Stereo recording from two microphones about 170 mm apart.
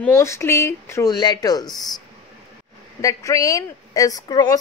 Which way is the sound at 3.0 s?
20° left (ahead or behind).